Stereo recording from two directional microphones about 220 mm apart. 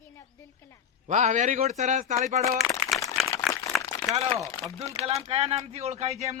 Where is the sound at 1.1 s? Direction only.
35° right (ahead or behind).